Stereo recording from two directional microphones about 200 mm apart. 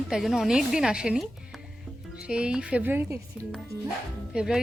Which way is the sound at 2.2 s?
5° right (ahead or behind).